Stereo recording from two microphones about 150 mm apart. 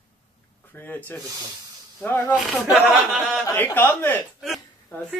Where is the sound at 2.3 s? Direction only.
5° right (ahead or behind).